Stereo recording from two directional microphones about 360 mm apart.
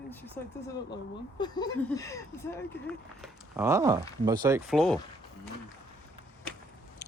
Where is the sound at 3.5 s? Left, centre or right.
Centre.